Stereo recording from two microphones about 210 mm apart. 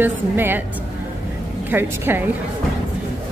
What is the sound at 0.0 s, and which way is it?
Speech, 10° right (ahead or behind).